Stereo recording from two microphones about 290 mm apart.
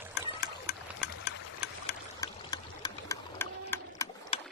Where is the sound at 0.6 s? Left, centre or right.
Left.